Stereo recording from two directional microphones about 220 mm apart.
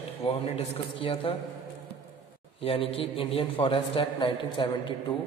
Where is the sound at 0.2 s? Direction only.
25° left (ahead or behind).